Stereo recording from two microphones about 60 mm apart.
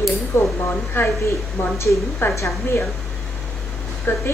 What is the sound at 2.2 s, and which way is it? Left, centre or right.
Speech, left.